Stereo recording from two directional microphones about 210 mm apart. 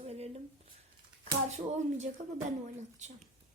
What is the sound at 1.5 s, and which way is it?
Speech, 35° right (ahead or behind).